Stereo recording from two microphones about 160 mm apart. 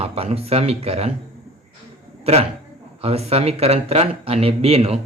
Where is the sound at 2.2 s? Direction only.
40° right (ahead or behind).